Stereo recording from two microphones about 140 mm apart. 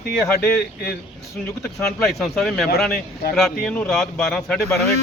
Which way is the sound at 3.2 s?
90° left.